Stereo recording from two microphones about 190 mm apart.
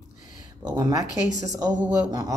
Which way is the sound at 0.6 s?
20° right (ahead or behind).